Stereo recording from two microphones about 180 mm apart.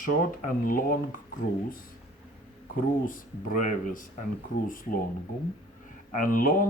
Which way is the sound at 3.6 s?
50° left (ahead or behind).